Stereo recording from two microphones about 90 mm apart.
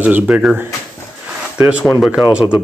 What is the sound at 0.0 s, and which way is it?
Speech, 15° right (ahead or behind).